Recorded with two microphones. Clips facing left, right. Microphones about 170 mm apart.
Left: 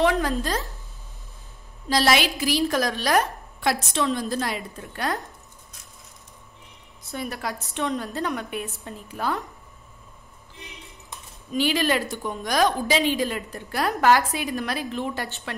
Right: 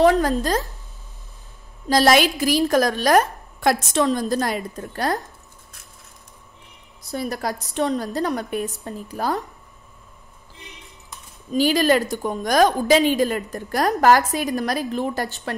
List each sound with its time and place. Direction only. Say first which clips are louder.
0.0 s a woman's voice: right 5 dB; 40° right (ahead or behind)
1.9 s a woman's voice: right 5 dB; 45° right (ahead or behind)
7.0 s a woman's voice: right 5 dB; 35° right (ahead or behind)
11.5 s a woman's voice: right 5 dB; 40° right (ahead or behind)